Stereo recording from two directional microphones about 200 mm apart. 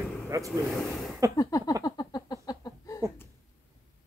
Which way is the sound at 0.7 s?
Centre (ahead or behind).